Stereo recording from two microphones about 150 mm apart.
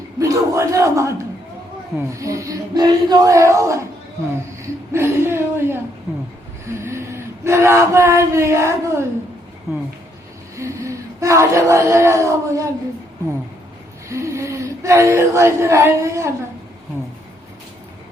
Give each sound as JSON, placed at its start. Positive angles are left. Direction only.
{"t": 0.2, "sound": "speech", "side_deg": -20}
{"t": 4.9, "sound": "a woman's voice", "side_deg": -15}
{"t": 6.7, "sound": "a sound", "side_deg": -20}
{"t": 10.6, "sound": "speech", "side_deg": -20}
{"t": 14.1, "sound": "speech", "side_deg": -20}